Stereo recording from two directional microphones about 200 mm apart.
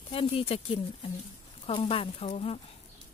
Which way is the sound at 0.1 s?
30° left (ahead or behind).